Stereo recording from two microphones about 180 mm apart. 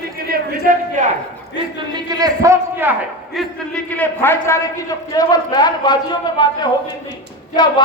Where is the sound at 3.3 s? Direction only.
5° left (ahead or behind); by 7.7 s 25° left (ahead or behind).